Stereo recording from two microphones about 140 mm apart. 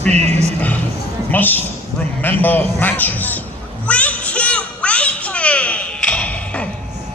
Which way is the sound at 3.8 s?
10° left (ahead or behind).